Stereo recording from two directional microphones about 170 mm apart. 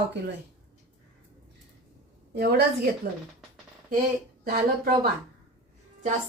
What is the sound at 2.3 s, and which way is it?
Speech, 70° right (ahead or behind).